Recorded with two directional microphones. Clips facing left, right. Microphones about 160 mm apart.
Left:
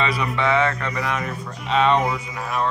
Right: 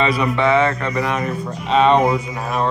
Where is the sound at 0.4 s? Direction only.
30° right (ahead or behind).